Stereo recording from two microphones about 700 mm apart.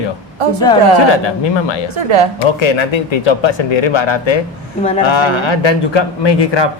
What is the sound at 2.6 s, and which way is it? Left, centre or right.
Speech, left.